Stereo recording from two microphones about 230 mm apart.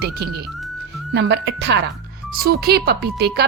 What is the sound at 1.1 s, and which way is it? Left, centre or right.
A woman's voice, right.